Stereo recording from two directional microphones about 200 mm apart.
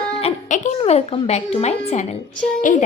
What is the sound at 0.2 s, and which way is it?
A woman's voice, 35° left (ahead or behind).